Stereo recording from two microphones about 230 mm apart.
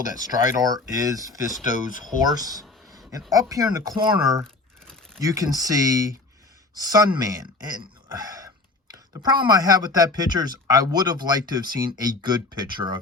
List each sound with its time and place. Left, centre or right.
0.2 s speech: centre